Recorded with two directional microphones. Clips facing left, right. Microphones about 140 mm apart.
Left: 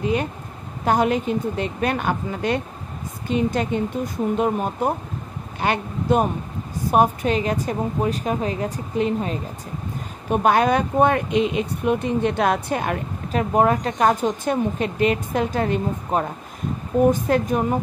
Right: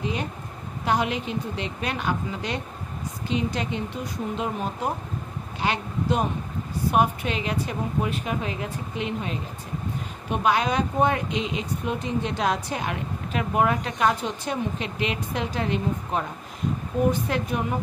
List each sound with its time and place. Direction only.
0.0 s a woman's voice: 55° left (ahead or behind)